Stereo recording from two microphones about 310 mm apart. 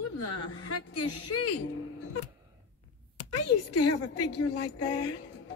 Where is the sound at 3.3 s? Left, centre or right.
Left.